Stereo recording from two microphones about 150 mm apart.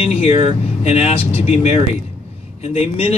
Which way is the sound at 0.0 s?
40° left (ahead or behind).